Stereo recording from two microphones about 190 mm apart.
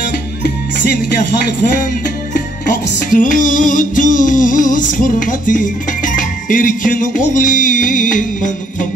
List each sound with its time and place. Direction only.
3.1 s music: 45° left (ahead or behind)